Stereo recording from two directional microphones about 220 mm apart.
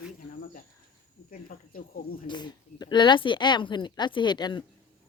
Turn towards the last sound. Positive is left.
turn(degrees=20)  # may be behind; listen again after turning